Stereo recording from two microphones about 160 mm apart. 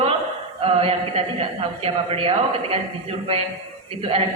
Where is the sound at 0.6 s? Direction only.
35° right (ahead or behind).